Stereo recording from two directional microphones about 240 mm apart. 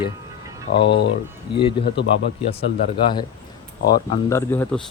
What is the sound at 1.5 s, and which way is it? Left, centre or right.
Speech, left.